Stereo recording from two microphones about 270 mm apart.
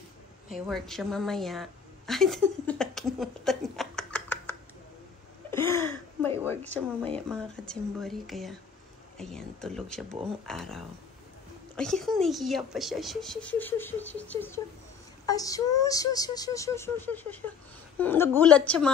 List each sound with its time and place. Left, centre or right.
0.5 s a woman's voice: centre
5.5 s a sound: centre
6.4 s speech: centre